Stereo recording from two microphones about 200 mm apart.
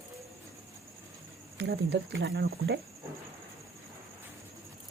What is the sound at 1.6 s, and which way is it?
Speech, 60° right (ahead or behind).